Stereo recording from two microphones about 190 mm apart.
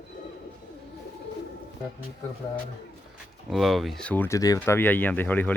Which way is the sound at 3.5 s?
Centre (ahead or behind).